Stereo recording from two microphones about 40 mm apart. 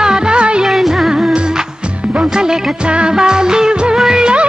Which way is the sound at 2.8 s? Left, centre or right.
Right.